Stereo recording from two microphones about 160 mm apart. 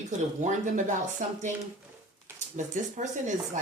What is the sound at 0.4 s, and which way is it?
Speech, 50° right (ahead or behind).